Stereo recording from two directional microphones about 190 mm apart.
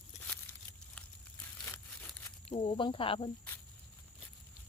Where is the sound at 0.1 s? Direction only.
35° left (ahead or behind).